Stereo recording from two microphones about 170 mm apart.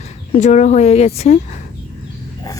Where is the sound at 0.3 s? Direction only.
45° left (ahead or behind).